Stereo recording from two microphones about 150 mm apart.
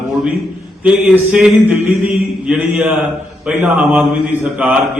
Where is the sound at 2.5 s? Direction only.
5° right (ahead or behind).